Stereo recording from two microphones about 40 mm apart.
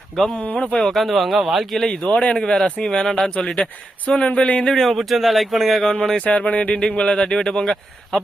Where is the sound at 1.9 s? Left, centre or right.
Left.